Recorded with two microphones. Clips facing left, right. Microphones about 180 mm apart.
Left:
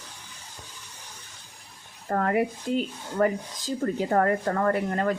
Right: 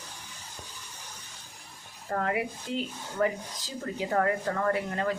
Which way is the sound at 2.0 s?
50° left (ahead or behind).